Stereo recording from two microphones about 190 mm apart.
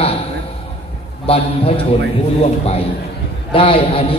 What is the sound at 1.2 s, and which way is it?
Speech, 30° left (ahead or behind).